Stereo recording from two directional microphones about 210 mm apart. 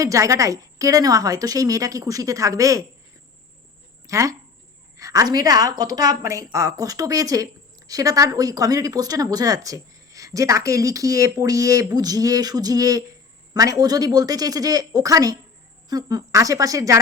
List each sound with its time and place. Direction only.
0.0 s speech: 15° right (ahead or behind)
4.0 s speech: 15° right (ahead or behind)